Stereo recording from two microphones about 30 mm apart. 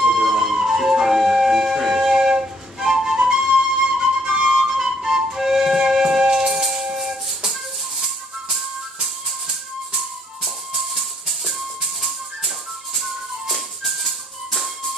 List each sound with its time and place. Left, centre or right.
0.0 s flute: centre
4.3 s flute: right
4.8 s music: right
10.7 s music: centre